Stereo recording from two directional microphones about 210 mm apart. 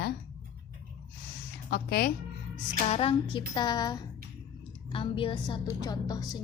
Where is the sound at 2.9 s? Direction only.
25° left (ahead or behind).